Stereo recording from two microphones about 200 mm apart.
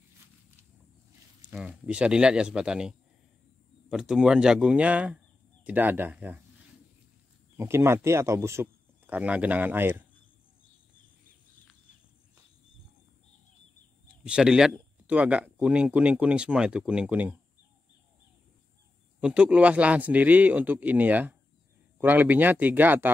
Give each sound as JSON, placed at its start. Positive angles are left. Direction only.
{"t": 1.5, "sound": "speech", "side_deg": -5}
{"t": 7.5, "sound": "speech", "side_deg": -15}
{"t": 14.2, "sound": "speech", "side_deg": -5}
{"t": 19.1, "sound": "speech", "side_deg": -5}